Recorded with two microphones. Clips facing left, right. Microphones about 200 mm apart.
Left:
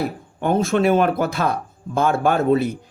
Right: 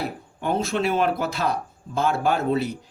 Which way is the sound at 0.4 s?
50° left (ahead or behind).